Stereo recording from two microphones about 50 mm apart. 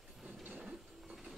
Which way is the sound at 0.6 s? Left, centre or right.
Centre.